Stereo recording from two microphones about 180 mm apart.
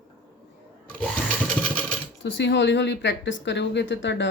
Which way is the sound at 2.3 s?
80° left.